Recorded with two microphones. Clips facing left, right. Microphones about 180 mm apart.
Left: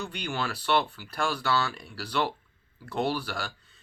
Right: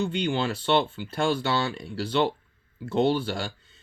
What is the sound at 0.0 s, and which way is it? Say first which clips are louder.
Speech: right 7 dB; 25° right (ahead or behind).